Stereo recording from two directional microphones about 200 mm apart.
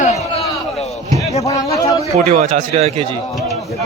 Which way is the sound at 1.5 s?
15° left (ahead or behind).